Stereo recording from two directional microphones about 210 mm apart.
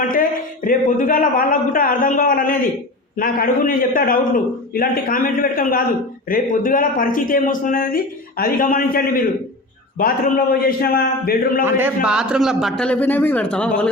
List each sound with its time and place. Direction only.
0.1 s a man's voice: 40° left (ahead or behind)
12.0 s a man's voice: 5° right (ahead or behind)